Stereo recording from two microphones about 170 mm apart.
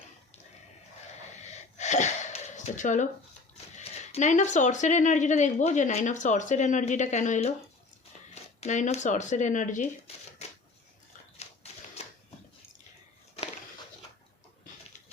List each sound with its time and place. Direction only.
1.4 s wheeze: 40° left (ahead or behind)
3.8 s speech: 40° left (ahead or behind)
8.6 s speech: 45° left (ahead or behind)
10.1 s crumpling: 35° left (ahead or behind)
12.0 s a sound: 40° left (ahead or behind)